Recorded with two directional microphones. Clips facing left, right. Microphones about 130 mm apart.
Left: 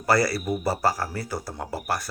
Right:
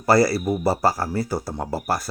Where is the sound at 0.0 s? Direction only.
30° right (ahead or behind).